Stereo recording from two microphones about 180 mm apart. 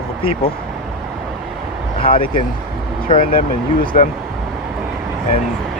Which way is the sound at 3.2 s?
50° left (ahead or behind).